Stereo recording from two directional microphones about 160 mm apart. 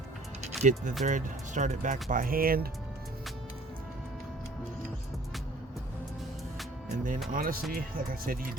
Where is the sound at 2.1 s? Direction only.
60° right (ahead or behind).